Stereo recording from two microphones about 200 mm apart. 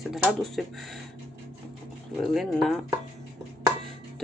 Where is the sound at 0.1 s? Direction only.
Centre (ahead or behind).